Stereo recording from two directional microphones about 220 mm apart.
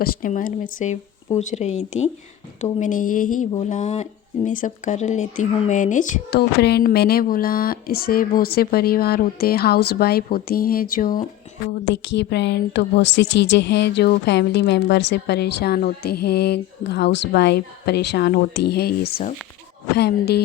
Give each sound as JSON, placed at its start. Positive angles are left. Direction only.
{"t": 0.0, "sound": "speech", "side_deg": 40}
{"t": 11.9, "sound": "a woman's voice", "side_deg": 55}
{"t": 20.0, "sound": "a woman's voice", "side_deg": 45}